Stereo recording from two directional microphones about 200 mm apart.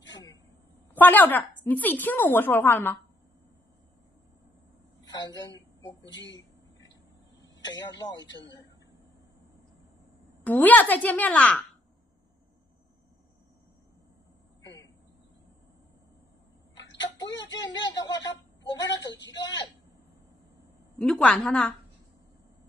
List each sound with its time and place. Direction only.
0.1 s a sound: 20° left (ahead or behind)
0.9 s a woman's voice: 10° left (ahead or behind)
5.0 s a sound: 20° left (ahead or behind)
6.0 s speech: 65° left (ahead or behind)
7.6 s speech: 20° left (ahead or behind)
10.4 s a woman's voice: 10° left (ahead or behind)
14.6 s a sound: 20° left (ahead or behind)
17.0 s speech: 20° left (ahead or behind)
19.3 s speech: 20° left (ahead or behind)
21.0 s a woman's voice: 5° left (ahead or behind)